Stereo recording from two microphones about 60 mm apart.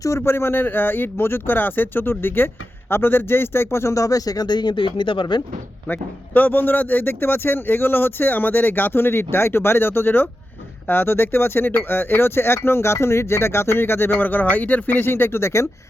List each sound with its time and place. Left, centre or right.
0.0 s speech: left
3.9 s speech: left
5.9 s speech: left